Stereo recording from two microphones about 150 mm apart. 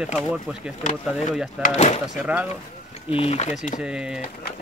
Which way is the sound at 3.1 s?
40° left (ahead or behind).